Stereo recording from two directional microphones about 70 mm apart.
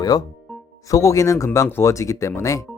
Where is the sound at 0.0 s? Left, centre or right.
Left.